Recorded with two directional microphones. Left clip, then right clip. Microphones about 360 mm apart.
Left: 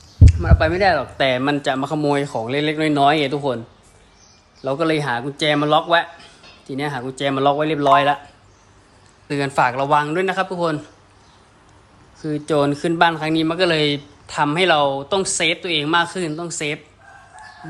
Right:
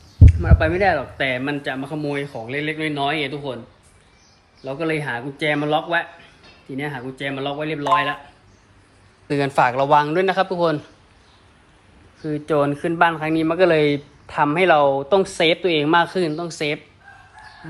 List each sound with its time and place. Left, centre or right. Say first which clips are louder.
0.2 s speech: left 2 dB; centre
4.6 s speech: left 4 dB; centre
9.2 s a man's voice: even; centre
12.2 s speech: left 1 dB; centre